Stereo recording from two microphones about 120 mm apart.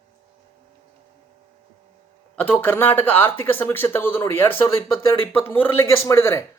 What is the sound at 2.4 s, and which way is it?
A man's voice, 15° left (ahead or behind).